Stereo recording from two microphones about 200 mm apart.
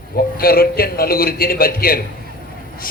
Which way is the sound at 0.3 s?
45° left (ahead or behind).